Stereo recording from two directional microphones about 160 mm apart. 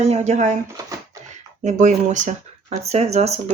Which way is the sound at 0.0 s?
40° right (ahead or behind).